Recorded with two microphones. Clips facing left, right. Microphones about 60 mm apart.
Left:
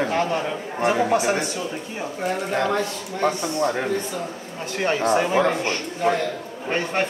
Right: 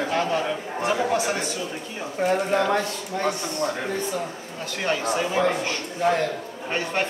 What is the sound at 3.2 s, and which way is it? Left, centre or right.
Speech, left.